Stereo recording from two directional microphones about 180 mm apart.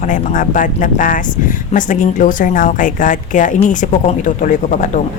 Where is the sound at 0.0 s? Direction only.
45° left (ahead or behind).